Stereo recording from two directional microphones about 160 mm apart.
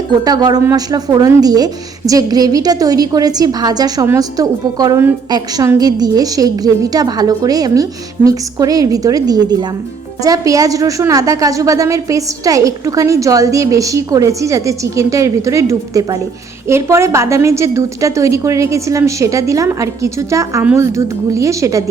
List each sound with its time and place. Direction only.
0.3 s a woman's voice: 25° right (ahead or behind)